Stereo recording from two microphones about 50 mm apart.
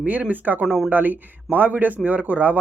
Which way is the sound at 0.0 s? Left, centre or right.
Right.